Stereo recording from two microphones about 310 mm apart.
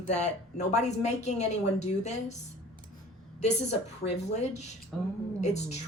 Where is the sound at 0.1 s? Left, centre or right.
Left.